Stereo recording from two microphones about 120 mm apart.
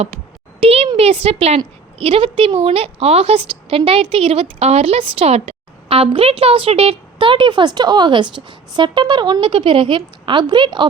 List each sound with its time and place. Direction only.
0.6 s a child's voice: 55° right (ahead or behind); by 10.8 s 40° right (ahead or behind)